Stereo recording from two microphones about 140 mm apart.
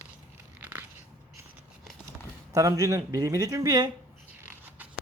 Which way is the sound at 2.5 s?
25° right (ahead or behind).